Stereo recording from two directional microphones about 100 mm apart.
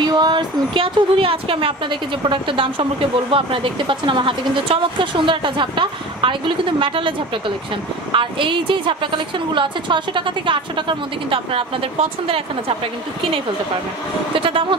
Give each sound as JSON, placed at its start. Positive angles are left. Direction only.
{"t": 0.0, "sound": "speech", "side_deg": -45}
{"t": 14.3, "sound": "speech", "side_deg": -60}